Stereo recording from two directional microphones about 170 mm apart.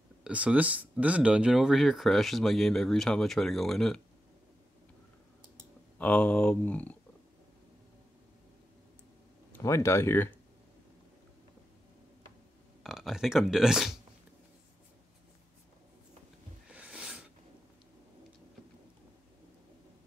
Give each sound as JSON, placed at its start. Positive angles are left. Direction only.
{"t": 0.2, "sound": "speech", "side_deg": -5}
{"t": 5.9, "sound": "speech", "side_deg": 10}
{"t": 9.5, "sound": "speech", "side_deg": 20}
{"t": 12.8, "sound": "speech", "side_deg": 0}
{"t": 16.7, "sound": "a sound", "side_deg": -5}